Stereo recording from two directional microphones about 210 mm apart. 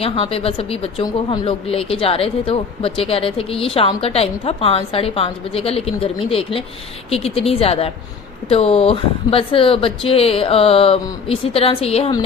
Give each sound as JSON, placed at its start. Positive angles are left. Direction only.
{"t": 0.0, "sound": "speech", "side_deg": 25}